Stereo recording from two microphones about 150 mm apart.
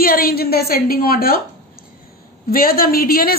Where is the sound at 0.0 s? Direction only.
80° left.